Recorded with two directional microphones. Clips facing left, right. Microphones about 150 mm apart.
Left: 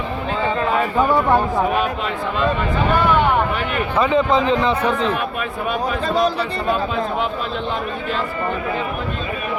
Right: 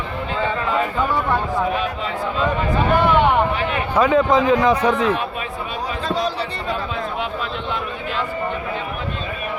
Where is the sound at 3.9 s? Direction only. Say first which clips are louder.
Right 1 dB; 10° right (ahead or behind).